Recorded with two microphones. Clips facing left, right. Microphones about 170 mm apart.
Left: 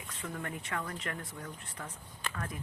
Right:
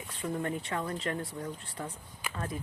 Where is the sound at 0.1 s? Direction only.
30° right (ahead or behind).